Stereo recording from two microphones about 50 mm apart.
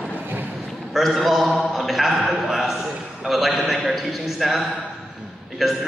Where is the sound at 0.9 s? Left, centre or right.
Centre.